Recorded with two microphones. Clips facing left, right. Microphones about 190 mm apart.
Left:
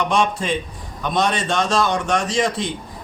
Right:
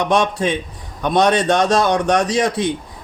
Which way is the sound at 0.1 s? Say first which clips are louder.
Right 3 dB; 60° right (ahead or behind).